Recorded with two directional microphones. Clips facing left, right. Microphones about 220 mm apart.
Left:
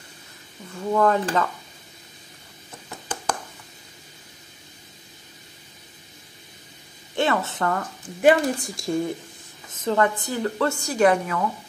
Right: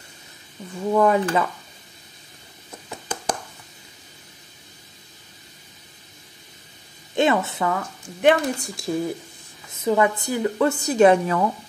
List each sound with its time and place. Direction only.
0.9 s a woman's voice: 10° right (ahead or behind)
7.2 s a woman's voice: 15° right (ahead or behind)